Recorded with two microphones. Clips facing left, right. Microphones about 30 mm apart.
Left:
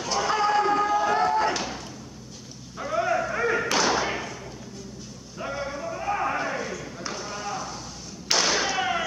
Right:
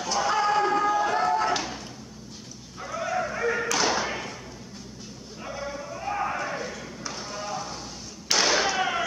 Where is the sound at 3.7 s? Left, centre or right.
Centre.